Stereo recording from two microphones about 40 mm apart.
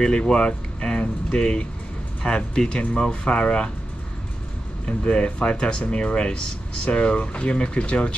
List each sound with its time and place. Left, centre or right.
0.0 s speech: left
4.8 s speech: left